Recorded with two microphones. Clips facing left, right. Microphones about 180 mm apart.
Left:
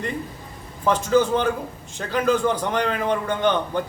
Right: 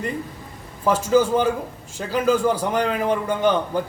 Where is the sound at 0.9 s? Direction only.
10° right (ahead or behind).